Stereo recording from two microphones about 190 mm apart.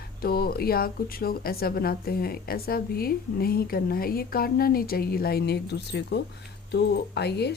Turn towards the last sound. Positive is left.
turn(degrees=60)  # may be behind; listen again after turning